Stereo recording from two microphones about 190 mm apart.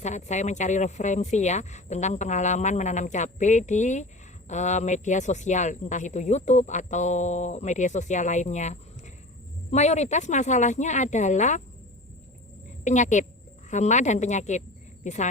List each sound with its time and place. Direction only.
0.0 s speech: 40° left (ahead or behind)
12.8 s a woman's voice: 40° left (ahead or behind)